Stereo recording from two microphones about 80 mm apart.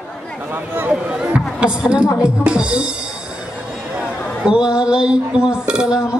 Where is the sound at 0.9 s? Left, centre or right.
Centre.